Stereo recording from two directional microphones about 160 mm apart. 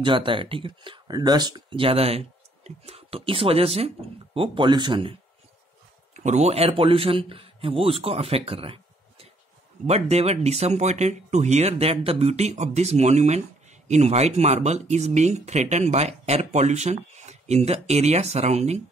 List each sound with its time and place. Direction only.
0.0 s speech: 30° right (ahead or behind)
6.1 s speech: 45° right (ahead or behind)